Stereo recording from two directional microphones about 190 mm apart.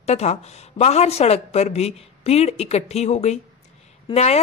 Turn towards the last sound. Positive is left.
turn(degrees=35)  # may be behind; listen again after turning